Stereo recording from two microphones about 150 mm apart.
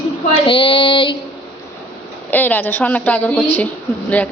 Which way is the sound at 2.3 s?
10° left (ahead or behind).